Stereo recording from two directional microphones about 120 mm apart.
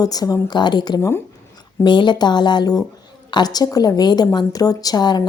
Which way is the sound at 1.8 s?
40° left (ahead or behind).